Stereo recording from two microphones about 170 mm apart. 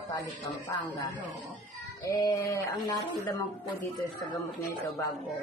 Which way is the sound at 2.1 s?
20° left (ahead or behind).